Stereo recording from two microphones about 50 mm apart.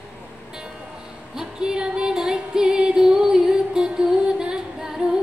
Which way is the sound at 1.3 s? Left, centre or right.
Centre.